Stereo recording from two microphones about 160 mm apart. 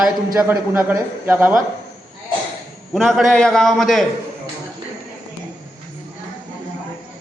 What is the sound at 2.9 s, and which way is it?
A man's voice, centre (ahead or behind).